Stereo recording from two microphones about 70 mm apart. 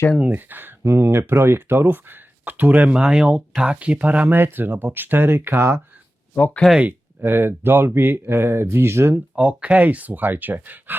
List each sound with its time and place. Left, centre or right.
0.2 s speech: right
6.3 s speech: centre
7.2 s speech: right
9.3 s speech: centre